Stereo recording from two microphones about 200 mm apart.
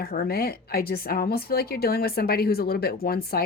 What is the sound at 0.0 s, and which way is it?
A woman's voice, 50° left (ahead or behind).